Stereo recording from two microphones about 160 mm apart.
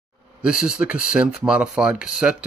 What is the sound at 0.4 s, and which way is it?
Speech, 5° right (ahead or behind).